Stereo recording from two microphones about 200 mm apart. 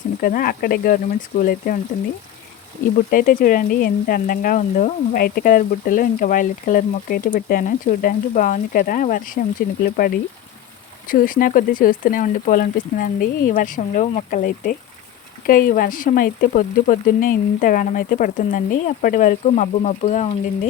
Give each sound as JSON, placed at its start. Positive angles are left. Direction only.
{"t": 0.2, "sound": "speech", "side_deg": 45}
{"t": 3.1, "sound": "speech", "side_deg": 45}
{"t": 11.1, "sound": "speech", "side_deg": 45}